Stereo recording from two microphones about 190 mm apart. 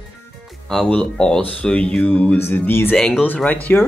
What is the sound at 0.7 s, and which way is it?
Speech, 5° left (ahead or behind).